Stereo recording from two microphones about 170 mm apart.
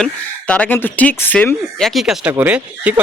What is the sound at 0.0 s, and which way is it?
A man's voice, 10° left (ahead or behind).